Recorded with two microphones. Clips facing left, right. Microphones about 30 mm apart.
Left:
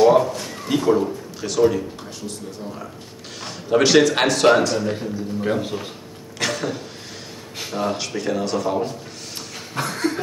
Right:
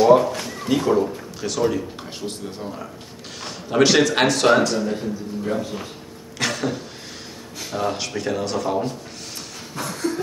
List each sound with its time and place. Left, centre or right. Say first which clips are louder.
0.0 s speech: even; centre
3.3 s speech: even; centre
5.5 s speech: left 2 dB; left
6.3 s a sound: even; centre
7.7 s speech: even; centre
9.8 s a sound: left 3 dB; left